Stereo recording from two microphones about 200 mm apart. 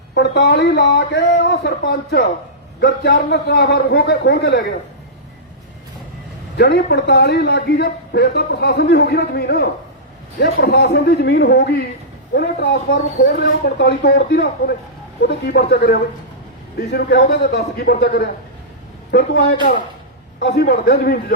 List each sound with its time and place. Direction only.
0.1 s speech: 55° left (ahead or behind)
6.6 s a man's voice: 55° left (ahead or behind)
20.6 s a man's voice: 55° left (ahead or behind)